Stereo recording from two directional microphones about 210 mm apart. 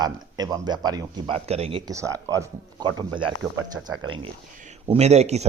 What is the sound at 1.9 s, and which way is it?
Speech, 15° right (ahead or behind).